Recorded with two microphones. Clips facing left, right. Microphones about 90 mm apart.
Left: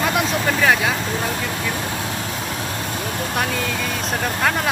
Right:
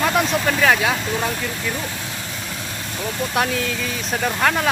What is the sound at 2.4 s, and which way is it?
Vehicle, 45° left (ahead or behind).